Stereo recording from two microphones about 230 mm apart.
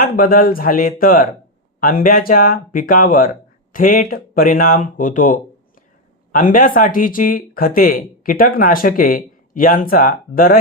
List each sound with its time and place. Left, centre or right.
0.0 s speech: left